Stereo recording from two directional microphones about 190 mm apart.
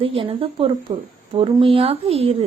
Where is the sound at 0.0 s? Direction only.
30° right (ahead or behind).